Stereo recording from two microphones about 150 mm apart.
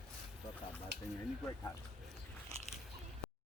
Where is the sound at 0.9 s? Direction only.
90° right.